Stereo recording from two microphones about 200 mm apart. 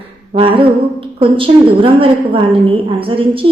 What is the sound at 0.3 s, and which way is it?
A woman's voice, 25° right (ahead or behind).